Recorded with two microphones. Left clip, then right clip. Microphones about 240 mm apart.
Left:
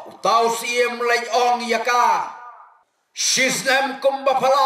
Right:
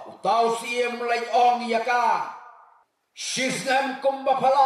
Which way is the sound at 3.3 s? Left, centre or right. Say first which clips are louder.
Left 5 dB; right.